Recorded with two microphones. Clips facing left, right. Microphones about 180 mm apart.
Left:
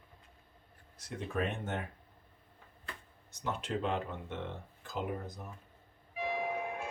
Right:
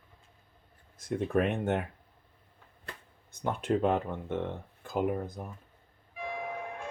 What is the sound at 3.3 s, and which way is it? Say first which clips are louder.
Speech: right 7 dB; 50° right (ahead or behind).